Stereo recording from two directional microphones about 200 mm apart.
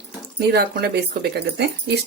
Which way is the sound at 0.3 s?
55° right (ahead or behind).